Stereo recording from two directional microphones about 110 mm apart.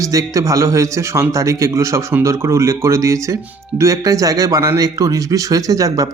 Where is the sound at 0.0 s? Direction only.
30° right (ahead or behind).